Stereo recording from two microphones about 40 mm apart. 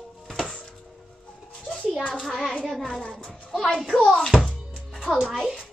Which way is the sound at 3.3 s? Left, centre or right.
Centre.